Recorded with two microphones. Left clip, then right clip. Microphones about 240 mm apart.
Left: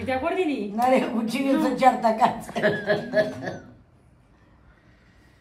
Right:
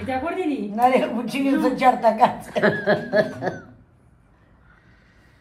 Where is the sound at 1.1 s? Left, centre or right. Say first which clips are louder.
Right 1 dB; right.